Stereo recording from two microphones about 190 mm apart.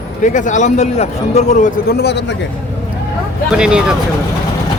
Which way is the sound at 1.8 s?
60° left (ahead or behind).